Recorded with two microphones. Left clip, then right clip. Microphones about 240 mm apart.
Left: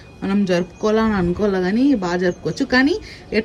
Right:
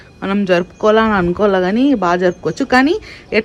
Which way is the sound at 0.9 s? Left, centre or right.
Right.